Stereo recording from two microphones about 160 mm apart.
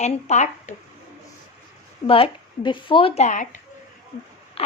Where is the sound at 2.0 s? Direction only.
35° left (ahead or behind); by 3.6 s 50° left (ahead or behind).